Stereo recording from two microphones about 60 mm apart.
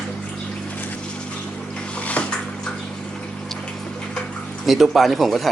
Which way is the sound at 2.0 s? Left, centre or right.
Left.